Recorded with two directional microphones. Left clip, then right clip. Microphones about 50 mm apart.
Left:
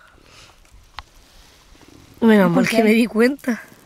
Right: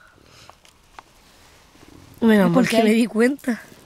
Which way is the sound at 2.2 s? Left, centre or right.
Left.